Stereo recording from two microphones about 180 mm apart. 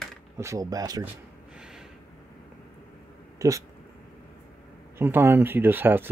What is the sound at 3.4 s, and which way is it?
Speech, 20° right (ahead or behind).